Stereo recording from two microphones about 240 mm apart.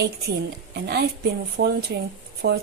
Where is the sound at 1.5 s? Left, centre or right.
Right.